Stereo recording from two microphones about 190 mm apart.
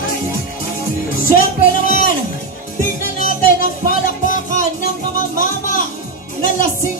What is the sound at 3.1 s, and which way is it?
Music, 45° left (ahead or behind).